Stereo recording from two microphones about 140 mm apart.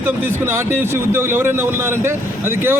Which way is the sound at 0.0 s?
15° right (ahead or behind).